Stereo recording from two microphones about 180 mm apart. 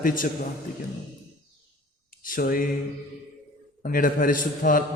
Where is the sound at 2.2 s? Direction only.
50° left (ahead or behind).